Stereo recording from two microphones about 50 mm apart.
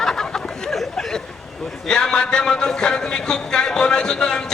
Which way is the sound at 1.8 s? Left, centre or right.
Centre.